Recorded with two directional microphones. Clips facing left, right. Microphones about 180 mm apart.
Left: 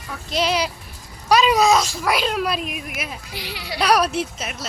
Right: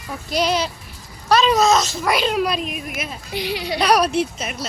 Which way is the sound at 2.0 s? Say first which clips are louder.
Right 2 dB; centre (ahead or behind).